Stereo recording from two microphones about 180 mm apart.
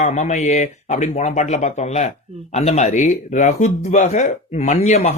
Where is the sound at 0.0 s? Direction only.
40° left (ahead or behind).